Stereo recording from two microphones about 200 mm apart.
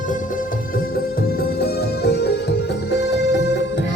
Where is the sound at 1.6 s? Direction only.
55° left (ahead or behind).